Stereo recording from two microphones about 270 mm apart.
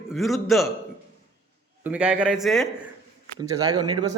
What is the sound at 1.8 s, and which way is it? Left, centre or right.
Speech, centre.